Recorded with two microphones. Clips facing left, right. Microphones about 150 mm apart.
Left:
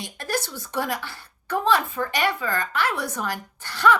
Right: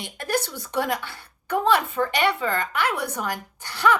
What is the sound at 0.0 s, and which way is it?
A woman's voice, 20° right (ahead or behind).